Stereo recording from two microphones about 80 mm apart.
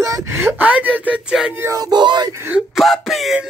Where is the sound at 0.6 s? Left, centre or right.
Centre.